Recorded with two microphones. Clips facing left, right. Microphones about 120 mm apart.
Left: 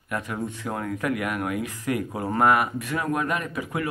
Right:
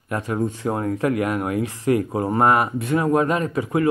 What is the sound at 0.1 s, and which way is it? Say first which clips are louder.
Speech: right 6 dB; 30° right (ahead or behind).